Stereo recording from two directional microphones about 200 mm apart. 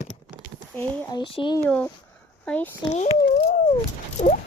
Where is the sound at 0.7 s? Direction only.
20° left (ahead or behind).